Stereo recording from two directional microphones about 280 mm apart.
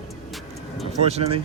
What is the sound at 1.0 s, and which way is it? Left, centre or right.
Speech, right.